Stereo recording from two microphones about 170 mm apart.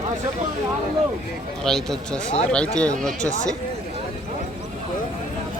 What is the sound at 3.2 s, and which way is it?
Speech, 45° left (ahead or behind).